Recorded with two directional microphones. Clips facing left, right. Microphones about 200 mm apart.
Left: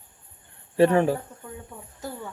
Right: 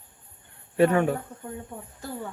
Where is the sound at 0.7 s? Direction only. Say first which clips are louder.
Left 2 dB; 30° left (ahead or behind).